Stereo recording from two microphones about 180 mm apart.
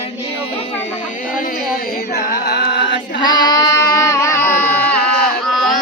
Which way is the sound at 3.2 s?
25° left (ahead or behind).